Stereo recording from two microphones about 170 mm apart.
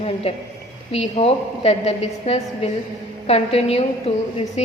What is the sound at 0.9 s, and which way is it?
A woman's voice, 35° left (ahead or behind).